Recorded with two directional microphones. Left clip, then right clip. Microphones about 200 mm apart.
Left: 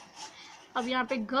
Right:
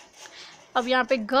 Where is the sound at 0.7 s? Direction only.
50° right (ahead or behind).